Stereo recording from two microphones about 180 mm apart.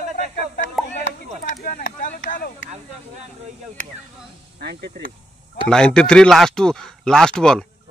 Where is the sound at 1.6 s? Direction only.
50° left (ahead or behind).